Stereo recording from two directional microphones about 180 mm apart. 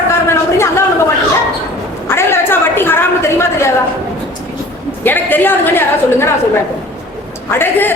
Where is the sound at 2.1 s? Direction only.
15° left (ahead or behind).